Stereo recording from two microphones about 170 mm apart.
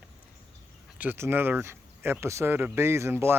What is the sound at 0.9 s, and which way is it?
Speech, 10° right (ahead or behind).